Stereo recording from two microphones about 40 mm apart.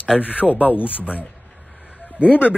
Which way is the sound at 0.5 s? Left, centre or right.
Left.